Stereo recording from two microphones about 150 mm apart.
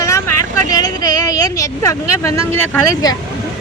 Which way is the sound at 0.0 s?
20° left (ahead or behind).